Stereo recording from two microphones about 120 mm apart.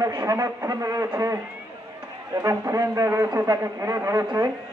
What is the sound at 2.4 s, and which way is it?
A man's voice, 25° right (ahead or behind).